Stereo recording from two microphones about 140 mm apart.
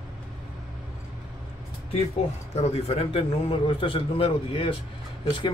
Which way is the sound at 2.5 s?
50° left (ahead or behind).